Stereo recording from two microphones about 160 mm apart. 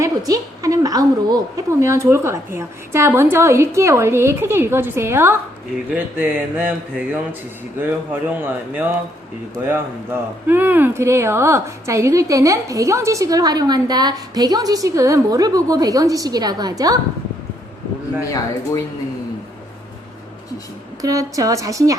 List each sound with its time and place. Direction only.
0.3 s a woman's voice: 20° right (ahead or behind)
18.2 s speech: 20° left (ahead or behind)
21.0 s speech: 20° right (ahead or behind)